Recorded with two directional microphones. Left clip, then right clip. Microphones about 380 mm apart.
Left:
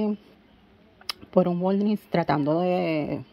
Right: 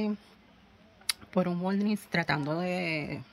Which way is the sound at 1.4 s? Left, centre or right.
Centre.